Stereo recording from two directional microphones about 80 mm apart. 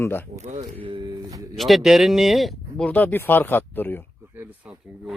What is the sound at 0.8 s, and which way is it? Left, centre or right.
Speech, right.